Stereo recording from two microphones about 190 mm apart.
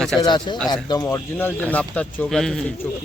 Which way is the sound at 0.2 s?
25° left (ahead or behind).